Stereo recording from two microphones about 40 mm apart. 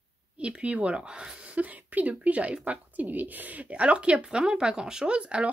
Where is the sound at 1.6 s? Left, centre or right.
Right.